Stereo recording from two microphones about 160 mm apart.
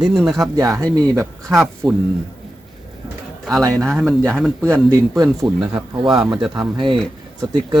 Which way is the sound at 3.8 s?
Centre (ahead or behind).